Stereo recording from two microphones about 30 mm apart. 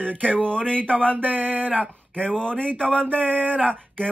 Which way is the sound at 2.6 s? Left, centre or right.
Left.